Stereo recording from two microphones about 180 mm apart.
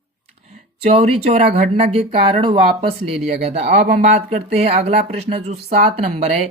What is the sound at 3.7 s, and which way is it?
Speech, 40° right (ahead or behind).